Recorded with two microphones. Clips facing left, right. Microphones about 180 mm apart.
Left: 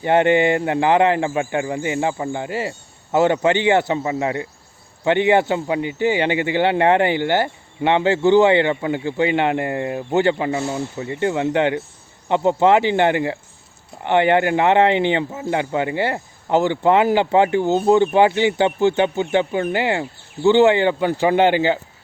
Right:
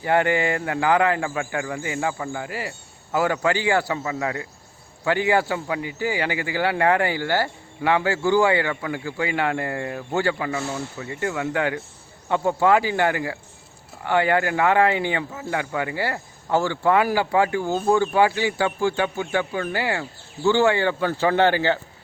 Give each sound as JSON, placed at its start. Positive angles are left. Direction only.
{"t": 0.0, "sound": "speech", "side_deg": 20}